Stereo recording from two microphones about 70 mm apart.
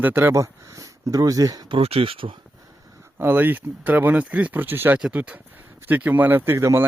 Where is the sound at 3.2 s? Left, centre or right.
Right.